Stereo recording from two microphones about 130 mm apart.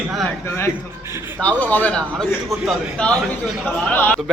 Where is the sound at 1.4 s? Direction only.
10° left (ahead or behind).